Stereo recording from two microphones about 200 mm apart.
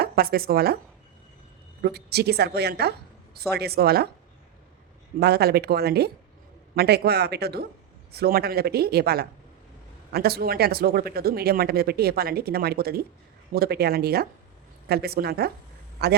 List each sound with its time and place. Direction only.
0.0 s speech: 50° right (ahead or behind)
1.8 s speech: 55° right (ahead or behind)
5.2 s speech: 55° right (ahead or behind)